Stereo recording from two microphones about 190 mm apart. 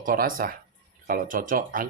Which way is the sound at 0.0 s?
45° right (ahead or behind).